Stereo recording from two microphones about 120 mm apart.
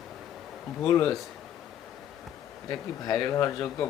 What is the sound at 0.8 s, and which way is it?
Speech, 30° left (ahead or behind).